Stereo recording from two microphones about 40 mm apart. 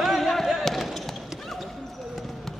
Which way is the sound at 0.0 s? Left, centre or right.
Centre.